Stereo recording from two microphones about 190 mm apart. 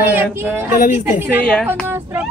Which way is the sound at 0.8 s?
40° left (ahead or behind).